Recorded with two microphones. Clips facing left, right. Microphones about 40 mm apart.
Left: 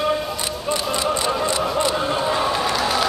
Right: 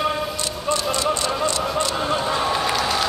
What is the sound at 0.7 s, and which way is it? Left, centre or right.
Music, centre.